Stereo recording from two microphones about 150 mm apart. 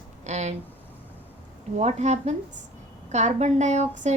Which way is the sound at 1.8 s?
50° right (ahead or behind).